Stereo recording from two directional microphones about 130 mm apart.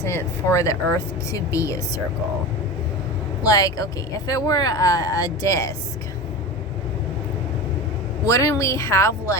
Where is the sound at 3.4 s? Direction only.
25° left (ahead or behind).